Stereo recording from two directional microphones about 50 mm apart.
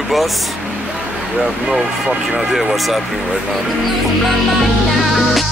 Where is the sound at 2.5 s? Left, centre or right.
Centre.